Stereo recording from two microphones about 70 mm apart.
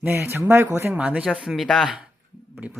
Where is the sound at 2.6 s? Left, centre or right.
Right.